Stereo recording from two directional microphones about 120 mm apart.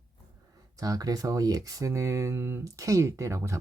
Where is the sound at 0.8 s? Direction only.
30° right (ahead or behind).